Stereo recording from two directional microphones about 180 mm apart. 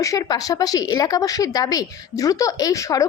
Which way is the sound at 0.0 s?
20° left (ahead or behind).